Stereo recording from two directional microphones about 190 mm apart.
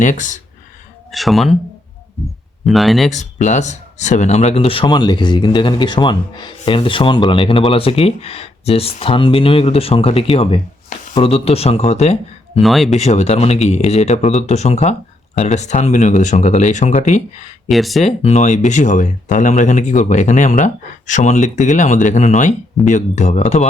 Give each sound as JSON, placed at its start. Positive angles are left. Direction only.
{"t": 0.0, "sound": "speech", "side_deg": 40}
{"t": 1.1, "sound": "speech", "side_deg": 0}
{"t": 2.6, "sound": "speech", "side_deg": 0}
{"t": 3.1, "sound": "speech", "side_deg": 40}
{"t": 12.5, "sound": "speech", "side_deg": 0}
{"t": 13.0, "sound": "speech", "side_deg": 35}
{"t": 17.7, "sound": "speech", "side_deg": 0}
{"t": 18.0, "sound": "speech", "side_deg": 35}